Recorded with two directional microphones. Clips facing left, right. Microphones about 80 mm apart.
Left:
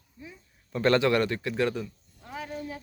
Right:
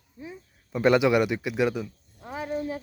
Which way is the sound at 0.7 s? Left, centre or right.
Centre.